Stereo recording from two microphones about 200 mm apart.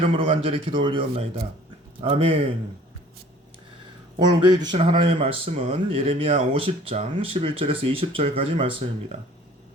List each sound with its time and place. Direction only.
0.2 s speech: 25° right (ahead or behind)
4.3 s speech: 20° right (ahead or behind)